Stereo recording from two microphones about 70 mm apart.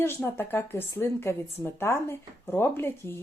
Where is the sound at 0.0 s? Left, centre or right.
Left.